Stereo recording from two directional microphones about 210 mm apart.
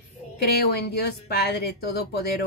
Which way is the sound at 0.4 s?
50° left (ahead or behind).